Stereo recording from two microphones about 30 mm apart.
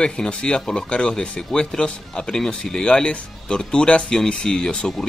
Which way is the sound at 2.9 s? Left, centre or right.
Left.